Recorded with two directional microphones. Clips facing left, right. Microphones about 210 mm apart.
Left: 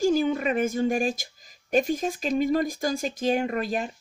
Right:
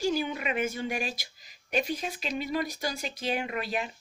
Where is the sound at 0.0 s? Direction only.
45° left (ahead or behind).